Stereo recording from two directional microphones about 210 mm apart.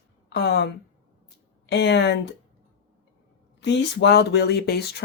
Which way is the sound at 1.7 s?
55° left (ahead or behind).